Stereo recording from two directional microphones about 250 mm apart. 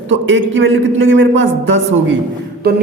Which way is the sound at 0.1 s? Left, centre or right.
Right.